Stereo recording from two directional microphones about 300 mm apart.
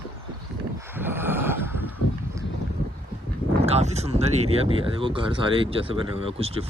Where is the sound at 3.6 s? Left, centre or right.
Right.